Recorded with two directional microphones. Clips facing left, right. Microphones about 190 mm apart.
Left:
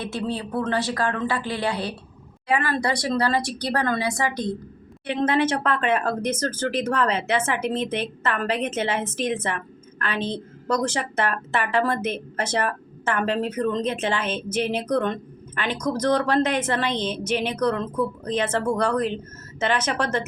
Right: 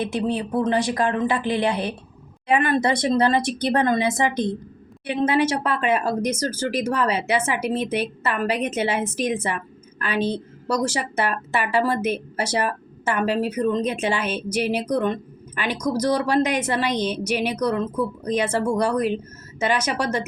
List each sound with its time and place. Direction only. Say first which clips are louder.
0.0 s speech: right 4 dB; 20° right (ahead or behind)
5.0 s a woman's voice: right 1 dB; 10° right (ahead or behind)